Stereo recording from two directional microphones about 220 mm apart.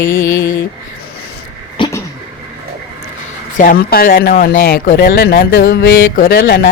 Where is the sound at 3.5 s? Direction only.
40° left (ahead or behind).